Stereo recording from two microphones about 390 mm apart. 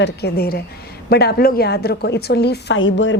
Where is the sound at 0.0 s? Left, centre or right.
Left.